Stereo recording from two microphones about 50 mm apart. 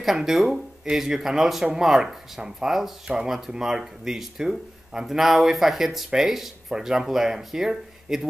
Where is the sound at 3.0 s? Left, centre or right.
Centre.